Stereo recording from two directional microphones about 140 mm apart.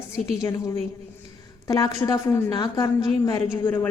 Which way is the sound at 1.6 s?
25° left (ahead or behind).